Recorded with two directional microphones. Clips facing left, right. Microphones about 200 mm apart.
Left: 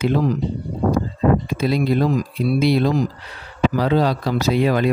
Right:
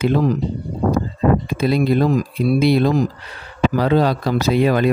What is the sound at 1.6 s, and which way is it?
Speech, 55° right (ahead or behind).